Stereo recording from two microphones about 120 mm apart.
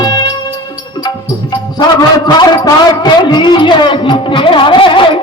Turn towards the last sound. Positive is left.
turn(degrees=45)  # may be behind; listen again after turning